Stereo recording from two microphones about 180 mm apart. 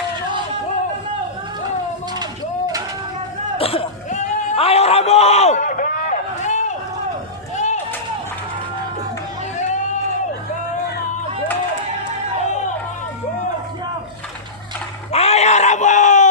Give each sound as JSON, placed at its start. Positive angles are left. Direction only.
{"t": 3.6, "sound": "a sound", "side_deg": 30}
{"t": 9.6, "sound": "music", "side_deg": 40}
{"t": 15.1, "sound": "screaming", "side_deg": 35}